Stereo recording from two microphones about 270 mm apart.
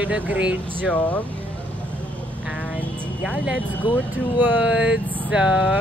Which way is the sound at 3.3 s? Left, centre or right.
Centre.